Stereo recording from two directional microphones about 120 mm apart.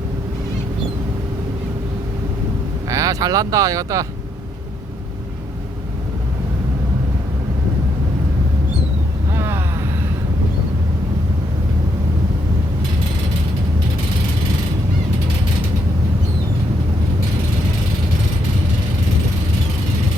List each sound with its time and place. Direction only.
2.9 s speech: 30° right (ahead or behind)
9.3 s vehicle: 20° right (ahead or behind)